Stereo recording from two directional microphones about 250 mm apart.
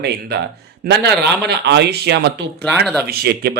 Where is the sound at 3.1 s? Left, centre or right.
Right.